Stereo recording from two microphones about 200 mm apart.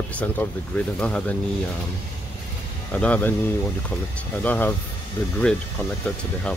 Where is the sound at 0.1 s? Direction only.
5° left (ahead or behind).